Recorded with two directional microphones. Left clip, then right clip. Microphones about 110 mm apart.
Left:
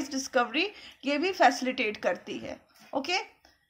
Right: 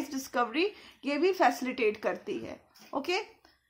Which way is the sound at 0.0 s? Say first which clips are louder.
Left 3 dB; 15° right (ahead or behind).